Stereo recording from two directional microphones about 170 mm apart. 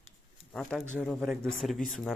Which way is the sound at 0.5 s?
5° left (ahead or behind).